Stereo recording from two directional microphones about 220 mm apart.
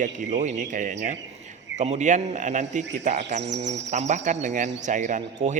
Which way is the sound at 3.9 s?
30° right (ahead or behind).